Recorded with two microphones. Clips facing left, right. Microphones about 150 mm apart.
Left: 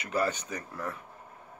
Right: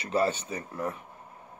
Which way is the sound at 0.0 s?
25° right (ahead or behind).